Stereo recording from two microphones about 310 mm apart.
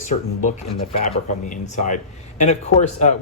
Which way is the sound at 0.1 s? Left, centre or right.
Left.